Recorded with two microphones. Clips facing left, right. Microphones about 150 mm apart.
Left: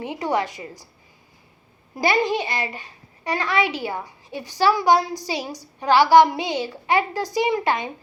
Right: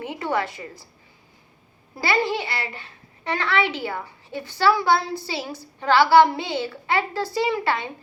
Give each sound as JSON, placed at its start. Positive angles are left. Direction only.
{"t": 0.0, "sound": "a child's voice", "side_deg": 15}
{"t": 2.0, "sound": "a child's voice", "side_deg": 15}